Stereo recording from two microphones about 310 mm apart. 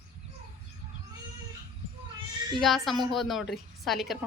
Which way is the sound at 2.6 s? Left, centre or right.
Centre.